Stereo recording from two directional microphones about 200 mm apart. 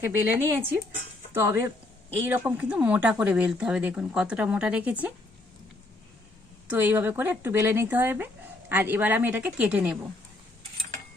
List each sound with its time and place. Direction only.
0.0 s speech: 10° right (ahead or behind)
6.7 s speech: 10° right (ahead or behind)